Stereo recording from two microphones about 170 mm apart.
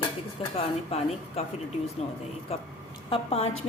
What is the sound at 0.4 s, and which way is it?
A woman's voice, 35° left (ahead or behind).